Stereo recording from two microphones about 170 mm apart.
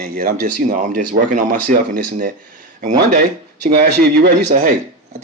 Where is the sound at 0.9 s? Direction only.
50° right (ahead or behind).